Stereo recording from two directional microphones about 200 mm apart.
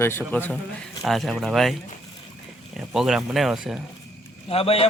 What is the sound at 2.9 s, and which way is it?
Speech, centre (ahead or behind).